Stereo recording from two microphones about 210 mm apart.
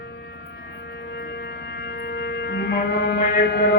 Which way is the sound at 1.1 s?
55° left (ahead or behind).